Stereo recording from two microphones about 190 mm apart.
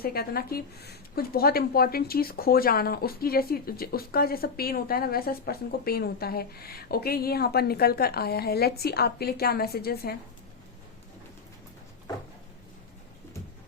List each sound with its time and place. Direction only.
0.0 s a woman's voice: 50° left (ahead or behind)